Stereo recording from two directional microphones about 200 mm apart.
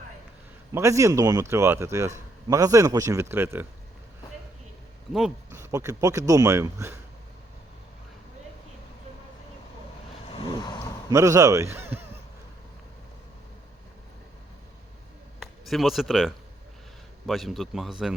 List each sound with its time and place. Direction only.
0.7 s speech: 15° right (ahead or behind)
5.5 s speech: 15° right (ahead or behind)
10.3 s vehicle: 20° left (ahead or behind)
11.1 s speech: 15° right (ahead or behind)
15.4 s a man's voice: centre (ahead or behind)